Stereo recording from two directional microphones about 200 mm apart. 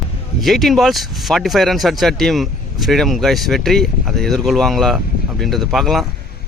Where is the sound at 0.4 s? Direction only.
Centre (ahead or behind).